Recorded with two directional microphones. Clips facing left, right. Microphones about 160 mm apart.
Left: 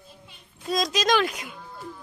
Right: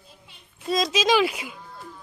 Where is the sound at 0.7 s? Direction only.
Centre (ahead or behind).